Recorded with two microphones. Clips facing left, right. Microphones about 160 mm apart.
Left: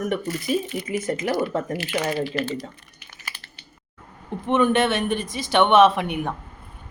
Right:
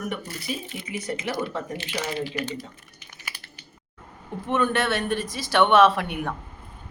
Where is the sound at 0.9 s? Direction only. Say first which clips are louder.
Left 3 dB; 50° left (ahead or behind).